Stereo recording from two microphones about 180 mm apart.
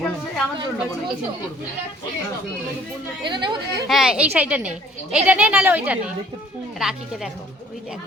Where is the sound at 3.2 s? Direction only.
25° right (ahead or behind).